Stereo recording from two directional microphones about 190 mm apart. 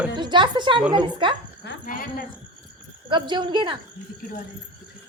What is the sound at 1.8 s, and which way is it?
Speech, 45° left (ahead or behind).